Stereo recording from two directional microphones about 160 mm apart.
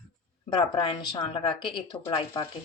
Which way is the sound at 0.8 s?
30° left (ahead or behind).